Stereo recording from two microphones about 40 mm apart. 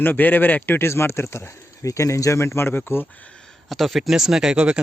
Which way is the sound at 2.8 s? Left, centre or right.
Left.